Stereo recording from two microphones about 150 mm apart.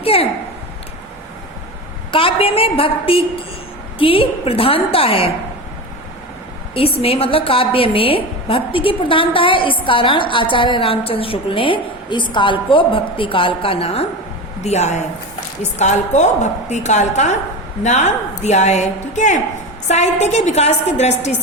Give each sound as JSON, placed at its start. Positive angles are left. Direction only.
{"t": 0.0, "sound": "a sound", "side_deg": 40}
{"t": 2.1, "sound": "a woman's voice", "side_deg": 40}
{"t": 6.7, "sound": "a woman's voice", "side_deg": 40}